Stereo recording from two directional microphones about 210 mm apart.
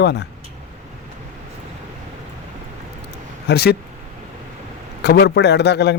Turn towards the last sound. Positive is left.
turn(degrees=50)  # may be behind; listen again after turning